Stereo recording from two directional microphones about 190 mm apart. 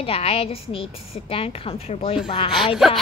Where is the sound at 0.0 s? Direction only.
30° left (ahead or behind).